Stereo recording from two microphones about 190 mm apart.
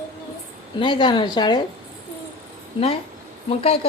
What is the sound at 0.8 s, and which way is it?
Speech, 25° left (ahead or behind).